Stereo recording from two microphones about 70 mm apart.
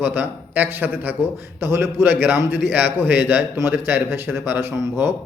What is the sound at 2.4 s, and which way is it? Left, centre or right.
Speech, right.